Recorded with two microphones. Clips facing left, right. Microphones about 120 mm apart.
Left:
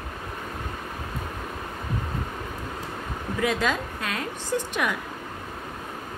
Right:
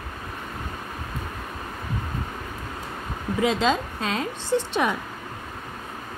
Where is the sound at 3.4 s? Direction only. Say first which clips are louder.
Right 3 dB; 20° right (ahead or behind).